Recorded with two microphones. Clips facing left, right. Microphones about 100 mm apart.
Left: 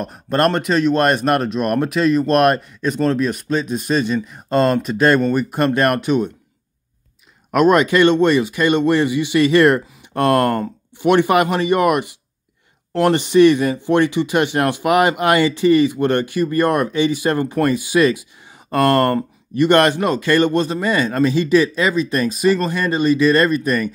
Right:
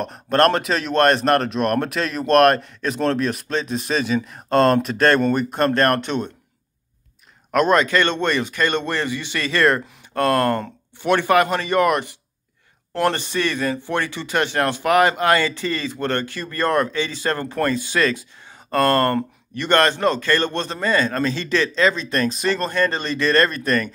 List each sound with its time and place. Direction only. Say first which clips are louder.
0.0 s speech: even; centre (ahead or behind)
7.5 s speech: left 4 dB; 10° left (ahead or behind)